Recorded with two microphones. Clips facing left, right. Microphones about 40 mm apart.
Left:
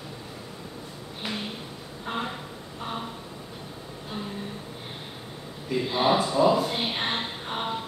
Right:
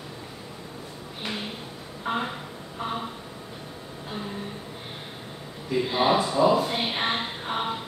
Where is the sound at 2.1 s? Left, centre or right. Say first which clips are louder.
Right 4 dB; centre.